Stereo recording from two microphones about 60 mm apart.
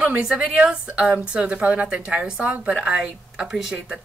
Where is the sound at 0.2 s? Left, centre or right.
Centre.